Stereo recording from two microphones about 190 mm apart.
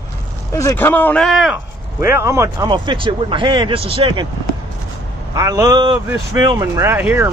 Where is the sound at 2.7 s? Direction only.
25° right (ahead or behind).